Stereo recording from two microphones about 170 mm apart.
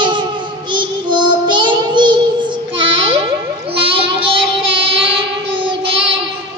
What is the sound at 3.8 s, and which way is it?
Child singing, 35° right (ahead or behind).